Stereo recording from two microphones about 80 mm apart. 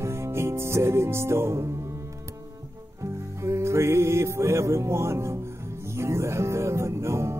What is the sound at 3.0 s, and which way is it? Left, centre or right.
Music, right.